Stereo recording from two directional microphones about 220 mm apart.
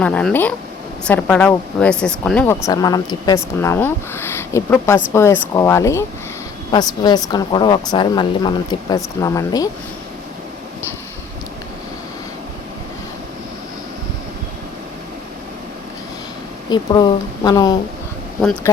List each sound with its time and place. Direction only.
0.0 s speech: 5° left (ahead or behind)
16.6 s speech: 20° left (ahead or behind)